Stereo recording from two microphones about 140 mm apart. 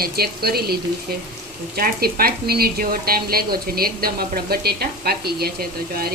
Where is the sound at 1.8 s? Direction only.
90° right.